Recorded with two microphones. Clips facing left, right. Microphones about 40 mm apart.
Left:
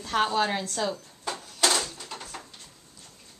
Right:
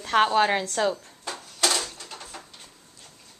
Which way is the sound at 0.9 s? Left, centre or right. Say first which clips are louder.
Left 1 dB; centre.